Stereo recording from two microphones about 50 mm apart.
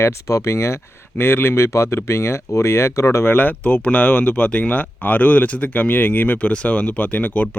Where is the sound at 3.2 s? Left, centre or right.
Left.